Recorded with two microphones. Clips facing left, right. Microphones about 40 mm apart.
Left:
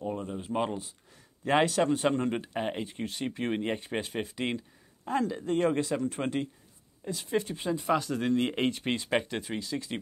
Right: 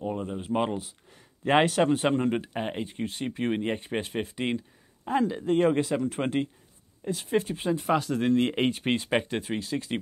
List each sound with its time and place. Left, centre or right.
0.0 s speech: centre
1.4 s a man's voice: right
2.1 s a man's voice: centre; by 7.8 s right
7.8 s speech: centre
9.6 s speech: right